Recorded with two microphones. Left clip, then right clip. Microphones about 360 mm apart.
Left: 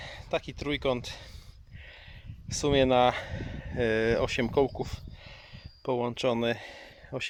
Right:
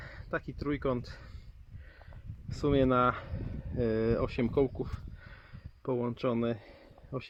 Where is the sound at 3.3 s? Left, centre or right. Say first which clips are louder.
Left 5 dB; left.